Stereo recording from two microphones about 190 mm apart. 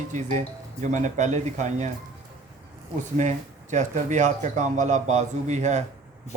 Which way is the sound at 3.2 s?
40° right (ahead or behind).